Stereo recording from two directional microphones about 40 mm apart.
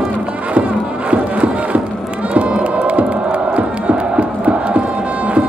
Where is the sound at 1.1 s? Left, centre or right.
Right.